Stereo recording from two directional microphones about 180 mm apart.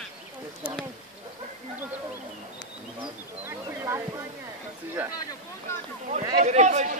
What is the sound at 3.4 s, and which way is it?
Speech, 15° right (ahead or behind).